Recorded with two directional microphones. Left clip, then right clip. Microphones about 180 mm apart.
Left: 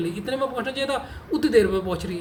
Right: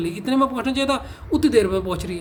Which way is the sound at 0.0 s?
55° right (ahead or behind).